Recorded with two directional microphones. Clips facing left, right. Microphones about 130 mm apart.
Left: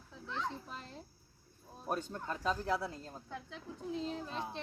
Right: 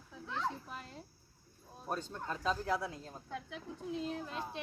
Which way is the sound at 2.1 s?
5° left (ahead or behind).